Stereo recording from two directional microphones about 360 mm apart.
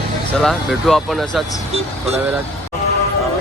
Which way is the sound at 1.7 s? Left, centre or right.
Centre.